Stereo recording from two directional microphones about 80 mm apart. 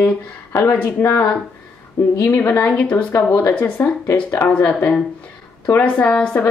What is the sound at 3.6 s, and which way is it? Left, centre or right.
Speech, left.